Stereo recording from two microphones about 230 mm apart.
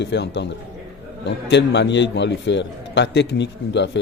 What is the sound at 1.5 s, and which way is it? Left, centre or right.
Speech, left.